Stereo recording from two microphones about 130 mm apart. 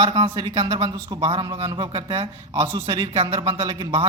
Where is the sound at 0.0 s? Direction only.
35° right (ahead or behind).